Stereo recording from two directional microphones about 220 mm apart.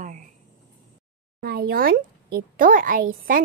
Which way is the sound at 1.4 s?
45° right (ahead or behind).